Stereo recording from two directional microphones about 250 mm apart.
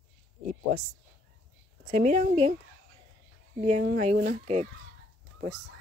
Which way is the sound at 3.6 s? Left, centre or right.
Right.